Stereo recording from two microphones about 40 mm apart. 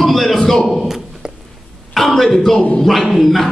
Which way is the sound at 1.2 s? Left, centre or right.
Centre.